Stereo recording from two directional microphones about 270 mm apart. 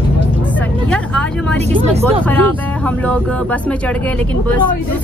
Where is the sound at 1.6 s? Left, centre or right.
Right.